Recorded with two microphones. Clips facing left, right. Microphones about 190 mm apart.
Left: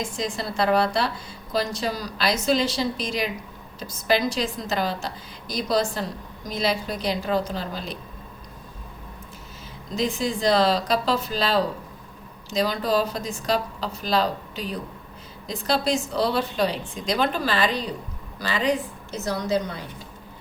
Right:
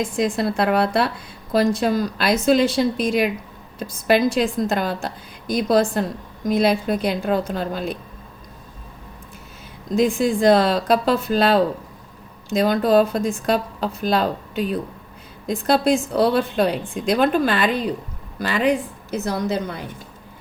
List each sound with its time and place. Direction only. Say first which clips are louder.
0.0 s a woman's voice: right 8 dB; 55° right (ahead or behind)
9.9 s a woman's voice: right 7 dB; 55° right (ahead or behind)